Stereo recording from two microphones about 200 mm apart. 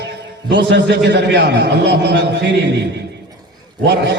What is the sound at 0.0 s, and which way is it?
A man's voice, 60° right (ahead or behind).